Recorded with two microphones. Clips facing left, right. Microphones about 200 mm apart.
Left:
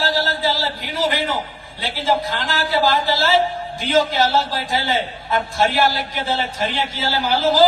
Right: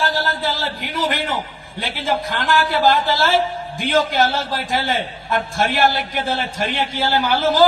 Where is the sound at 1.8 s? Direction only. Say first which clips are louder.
Left 2 dB; 50° right (ahead or behind).